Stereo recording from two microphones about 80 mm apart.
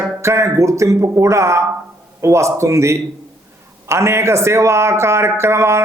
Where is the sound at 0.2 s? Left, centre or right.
Right.